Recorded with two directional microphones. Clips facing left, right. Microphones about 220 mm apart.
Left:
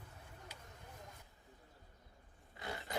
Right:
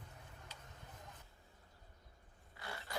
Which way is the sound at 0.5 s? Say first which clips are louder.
Left 1 dB; 10° left (ahead or behind).